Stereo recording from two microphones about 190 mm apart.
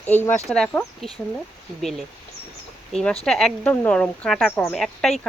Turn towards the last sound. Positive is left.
turn(degrees=0)  # may be behind; listen again after turning